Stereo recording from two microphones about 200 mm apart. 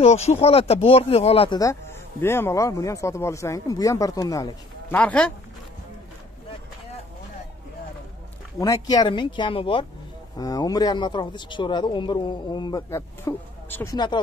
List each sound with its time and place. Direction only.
0.0 s speech: 30° left (ahead or behind)
1.6 s speech: 15° left (ahead or behind)
4.9 s speech: 5° left (ahead or behind)
8.5 s speech: 20° left (ahead or behind)
13.9 s speech: 20° left (ahead or behind)